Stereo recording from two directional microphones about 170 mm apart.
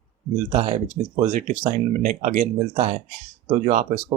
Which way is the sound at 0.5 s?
45° right (ahead or behind).